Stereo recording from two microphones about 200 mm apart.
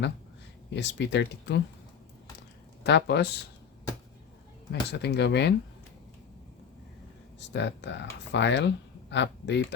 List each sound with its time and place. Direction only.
0.7 s speech: 60° left (ahead or behind)
2.8 s speech: 55° left (ahead or behind)
4.7 s speech: 55° left (ahead or behind)
7.3 s speech: 60° left (ahead or behind)